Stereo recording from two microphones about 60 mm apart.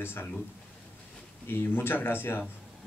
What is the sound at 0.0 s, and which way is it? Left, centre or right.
Speech, left.